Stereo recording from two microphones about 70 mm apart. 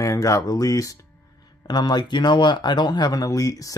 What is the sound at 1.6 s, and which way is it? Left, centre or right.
Speech, left.